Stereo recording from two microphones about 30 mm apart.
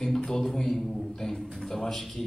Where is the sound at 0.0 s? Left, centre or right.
Centre.